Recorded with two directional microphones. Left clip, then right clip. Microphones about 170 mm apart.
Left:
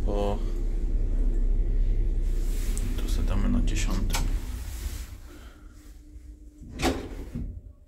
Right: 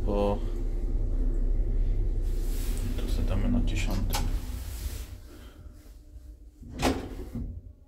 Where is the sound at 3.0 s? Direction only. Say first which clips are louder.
Even; centre (ahead or behind).